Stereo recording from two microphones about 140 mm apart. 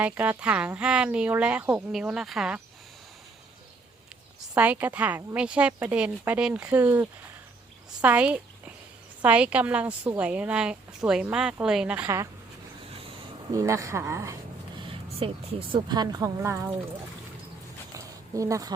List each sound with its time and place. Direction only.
0.0 s a woman's voice: 10° right (ahead or behind)
4.5 s a woman's voice: 10° right (ahead or behind)
8.0 s a woman's voice: 10° right (ahead or behind)
12.0 s speech: 20° right (ahead or behind)
13.5 s speech: 25° right (ahead or behind)
14.8 s speech: 40° right (ahead or behind)
16.4 s speech: 20° right (ahead or behind)
17.9 s a sound: 25° right (ahead or behind)